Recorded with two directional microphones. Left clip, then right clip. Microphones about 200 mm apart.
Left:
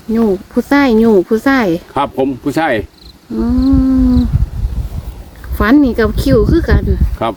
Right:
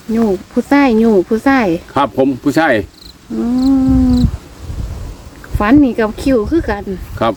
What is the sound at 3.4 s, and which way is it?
Cat, 30° left (ahead or behind).